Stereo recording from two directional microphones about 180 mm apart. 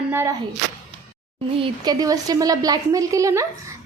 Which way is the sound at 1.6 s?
25° right (ahead or behind).